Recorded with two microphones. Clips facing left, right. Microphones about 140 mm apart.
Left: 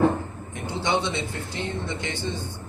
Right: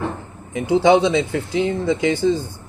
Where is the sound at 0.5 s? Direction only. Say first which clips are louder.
Right 12 dB; 90° right.